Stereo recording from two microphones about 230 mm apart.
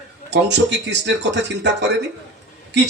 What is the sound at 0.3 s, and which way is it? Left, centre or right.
Speech, right.